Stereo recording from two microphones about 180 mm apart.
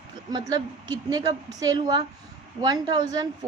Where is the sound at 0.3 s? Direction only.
20° right (ahead or behind).